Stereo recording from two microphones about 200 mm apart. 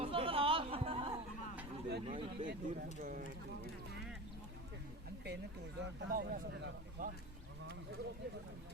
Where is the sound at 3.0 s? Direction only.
40° right (ahead or behind).